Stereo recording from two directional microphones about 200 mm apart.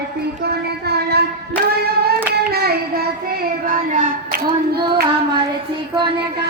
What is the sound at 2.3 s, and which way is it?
Child singing, 55° right (ahead or behind).